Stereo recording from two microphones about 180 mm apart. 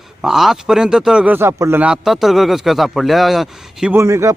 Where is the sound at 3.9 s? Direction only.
15° right (ahead or behind).